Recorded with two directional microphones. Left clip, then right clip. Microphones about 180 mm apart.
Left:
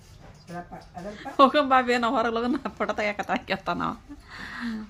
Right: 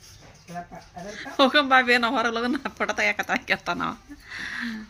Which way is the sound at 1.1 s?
10° left (ahead or behind).